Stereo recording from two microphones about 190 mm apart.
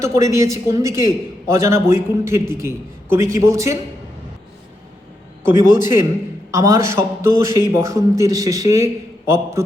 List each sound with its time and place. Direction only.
0.0 s a man's voice: 15° right (ahead or behind)
5.4 s a man's voice: 15° right (ahead or behind)